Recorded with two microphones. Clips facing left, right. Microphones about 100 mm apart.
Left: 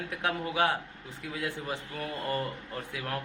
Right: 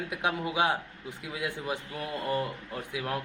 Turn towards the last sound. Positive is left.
turn(degrees=-15)  # may be behind; listen again after turning